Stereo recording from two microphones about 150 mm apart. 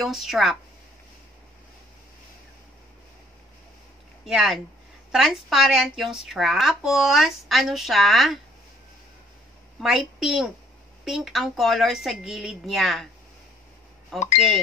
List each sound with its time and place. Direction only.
0.0 s a woman's voice: centre (ahead or behind)
4.3 s a woman's voice: centre (ahead or behind)
9.8 s a woman's voice: centre (ahead or behind)
14.1 s a woman's voice: centre (ahead or behind)